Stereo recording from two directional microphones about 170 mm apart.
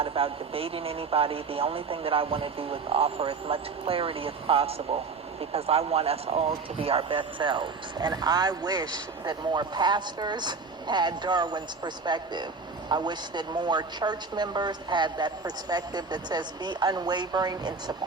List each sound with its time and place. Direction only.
0.0 s speech: 35° right (ahead or behind)